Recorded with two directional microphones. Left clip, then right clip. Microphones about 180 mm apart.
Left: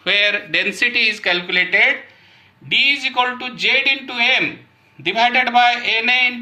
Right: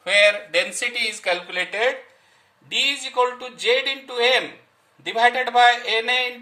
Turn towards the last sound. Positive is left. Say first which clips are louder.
# left 6 dB
turn(degrees=-25)  # may be behind; listen again after turning